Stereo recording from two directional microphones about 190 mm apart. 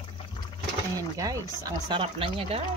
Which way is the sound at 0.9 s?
15° right (ahead or behind).